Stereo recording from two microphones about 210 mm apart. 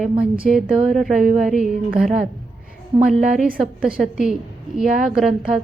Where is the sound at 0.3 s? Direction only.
5° right (ahead or behind).